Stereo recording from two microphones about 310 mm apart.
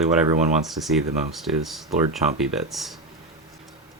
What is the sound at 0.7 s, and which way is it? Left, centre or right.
Speech, centre.